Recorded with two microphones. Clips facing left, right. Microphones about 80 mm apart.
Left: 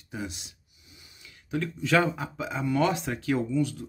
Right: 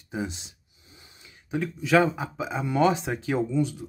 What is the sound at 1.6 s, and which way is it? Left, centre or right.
Speech, centre.